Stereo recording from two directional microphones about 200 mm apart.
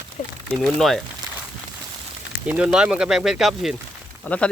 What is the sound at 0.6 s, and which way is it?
Speech, centre (ahead or behind).